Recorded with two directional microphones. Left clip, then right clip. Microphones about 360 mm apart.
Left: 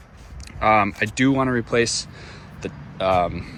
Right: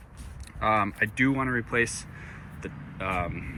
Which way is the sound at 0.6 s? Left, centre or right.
Centre.